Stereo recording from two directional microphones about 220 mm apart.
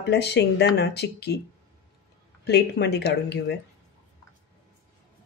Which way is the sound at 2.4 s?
50° left (ahead or behind).